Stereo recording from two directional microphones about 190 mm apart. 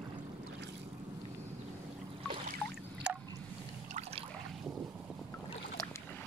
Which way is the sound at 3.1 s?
5° right (ahead or behind).